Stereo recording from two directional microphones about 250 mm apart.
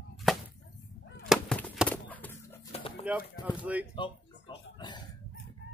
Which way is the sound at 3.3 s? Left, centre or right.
Centre.